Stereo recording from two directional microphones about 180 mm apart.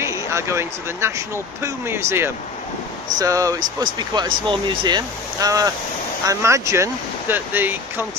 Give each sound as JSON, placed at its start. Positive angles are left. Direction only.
{"t": 0.0, "sound": "speech", "side_deg": -15}